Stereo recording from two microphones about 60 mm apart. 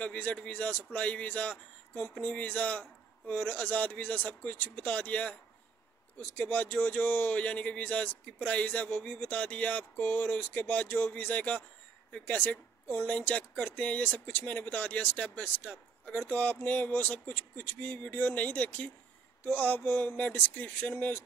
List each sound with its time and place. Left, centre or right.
0.0 s speech: left
12.8 s speech: left
13.1 s speech: left